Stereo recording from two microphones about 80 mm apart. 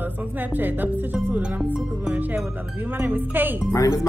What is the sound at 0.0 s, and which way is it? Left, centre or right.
Speech, right.